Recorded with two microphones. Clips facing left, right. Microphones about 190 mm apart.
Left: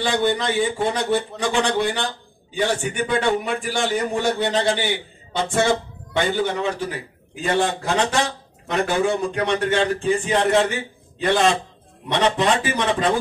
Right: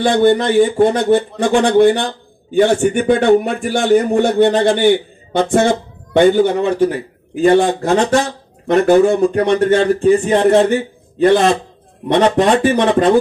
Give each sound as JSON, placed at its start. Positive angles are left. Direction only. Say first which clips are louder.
{"t": 0.0, "sound": "a man's voice", "louder": "right 9 dB", "side_deg": -55}
{"t": 12.1, "sound": "a man's voice", "louder": "right 7 dB", "side_deg": -50}